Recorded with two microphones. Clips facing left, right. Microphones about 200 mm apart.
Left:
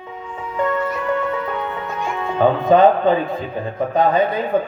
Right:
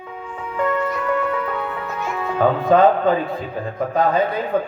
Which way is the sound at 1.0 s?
25° left (ahead or behind).